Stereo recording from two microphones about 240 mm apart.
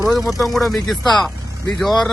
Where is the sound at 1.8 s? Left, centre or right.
Centre.